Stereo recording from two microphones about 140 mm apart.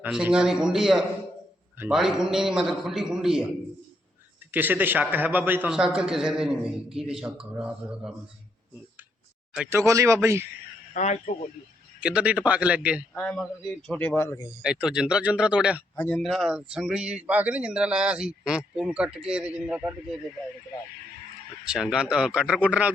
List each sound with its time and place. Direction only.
0.0 s a man's voice: 5° right (ahead or behind)
4.5 s a man's voice: 15° right (ahead or behind)
9.6 s speech: 20° right (ahead or behind)
10.9 s speech: 55° left (ahead or behind)
11.9 s speech: 10° right (ahead or behind)
13.1 s a man's voice: 5° left (ahead or behind)
14.6 s speech: 5° right (ahead or behind)
16.0 s a man's voice: 10° left (ahead or behind)
16.2 s speech: centre (ahead or behind)
21.7 s speech: 5° right (ahead or behind)